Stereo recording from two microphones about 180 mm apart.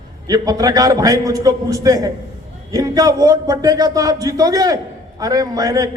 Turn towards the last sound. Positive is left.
turn(degrees=-20)  # may be behind; listen again after turning